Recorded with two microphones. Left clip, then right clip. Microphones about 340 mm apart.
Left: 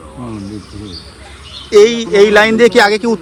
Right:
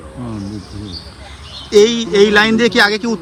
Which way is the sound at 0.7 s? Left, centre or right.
Centre.